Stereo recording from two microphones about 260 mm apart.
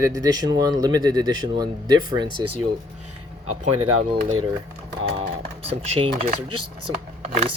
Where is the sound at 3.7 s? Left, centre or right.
Right.